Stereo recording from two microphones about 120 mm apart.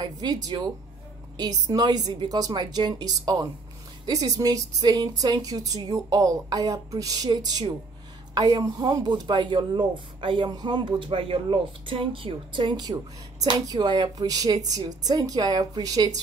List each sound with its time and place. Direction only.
0.2 s speech: 35° right (ahead or behind)
1.7 s speech: 30° right (ahead or behind)